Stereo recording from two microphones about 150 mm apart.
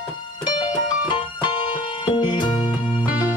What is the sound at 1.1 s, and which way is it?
Music, 30° left (ahead or behind).